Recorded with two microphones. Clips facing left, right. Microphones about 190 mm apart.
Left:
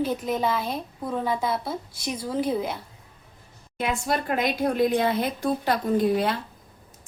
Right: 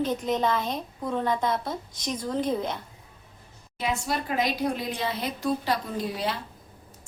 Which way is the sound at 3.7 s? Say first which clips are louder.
Left 3 dB; 55° left (ahead or behind).